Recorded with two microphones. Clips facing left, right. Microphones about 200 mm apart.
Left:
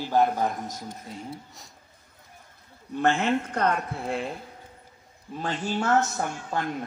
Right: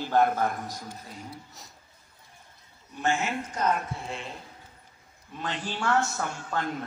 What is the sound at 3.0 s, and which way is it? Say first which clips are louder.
Speech: left 5 dB; 55° left (ahead or behind).